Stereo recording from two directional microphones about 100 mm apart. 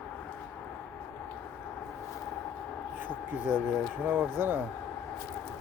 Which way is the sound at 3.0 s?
20° right (ahead or behind).